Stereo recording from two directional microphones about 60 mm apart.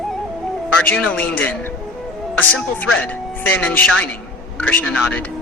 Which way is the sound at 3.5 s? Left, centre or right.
Left.